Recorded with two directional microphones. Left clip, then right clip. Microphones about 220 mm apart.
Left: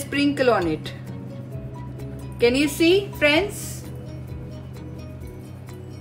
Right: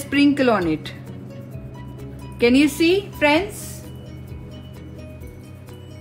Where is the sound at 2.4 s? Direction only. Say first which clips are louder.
Right 2 dB; 25° right (ahead or behind).